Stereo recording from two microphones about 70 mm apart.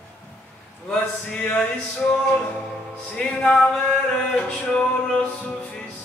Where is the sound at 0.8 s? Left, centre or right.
Centre.